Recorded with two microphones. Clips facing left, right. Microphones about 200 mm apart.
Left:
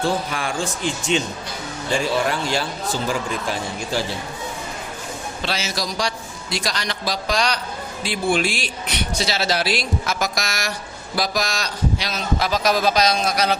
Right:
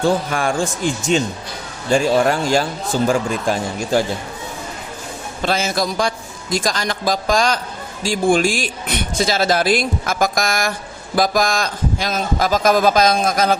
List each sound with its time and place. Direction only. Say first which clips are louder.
0.3 s speech: right 6 dB; 45° right (ahead or behind)
5.4 s speech: right 8 dB; 50° right (ahead or behind)